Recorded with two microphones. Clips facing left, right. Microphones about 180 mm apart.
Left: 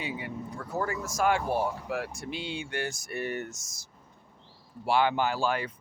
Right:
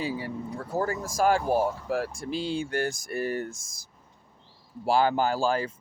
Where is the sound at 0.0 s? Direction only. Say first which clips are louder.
Right 4 dB; 35° right (ahead or behind).